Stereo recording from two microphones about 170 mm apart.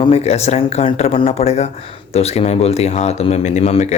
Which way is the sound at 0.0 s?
40° left (ahead or behind).